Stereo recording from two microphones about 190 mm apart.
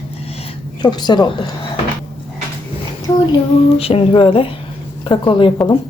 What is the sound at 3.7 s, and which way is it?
A woman's voice, 30° left (ahead or behind).